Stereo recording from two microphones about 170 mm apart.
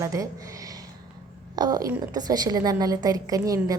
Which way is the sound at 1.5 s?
25° right (ahead or behind).